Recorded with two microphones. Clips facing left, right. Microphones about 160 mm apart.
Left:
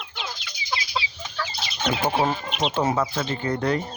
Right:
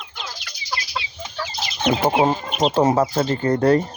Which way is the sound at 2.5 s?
40° right (ahead or behind).